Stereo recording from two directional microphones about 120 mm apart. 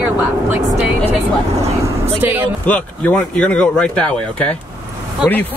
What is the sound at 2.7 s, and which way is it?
Speech, 10° left (ahead or behind).